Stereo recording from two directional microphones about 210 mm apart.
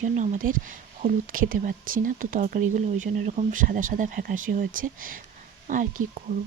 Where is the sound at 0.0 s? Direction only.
35° right (ahead or behind).